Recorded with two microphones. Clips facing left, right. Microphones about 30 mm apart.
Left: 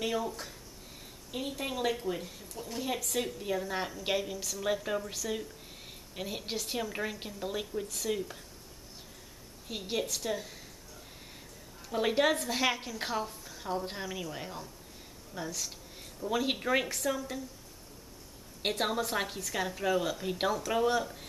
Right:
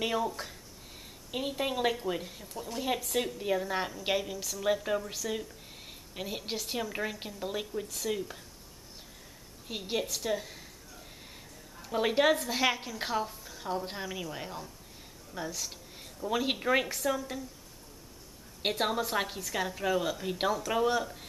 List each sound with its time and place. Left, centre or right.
0.0 s a woman's voice: centre
1.3 s a woman's voice: centre
9.7 s a woman's voice: centre
11.8 s a woman's voice: centre
18.6 s a woman's voice: centre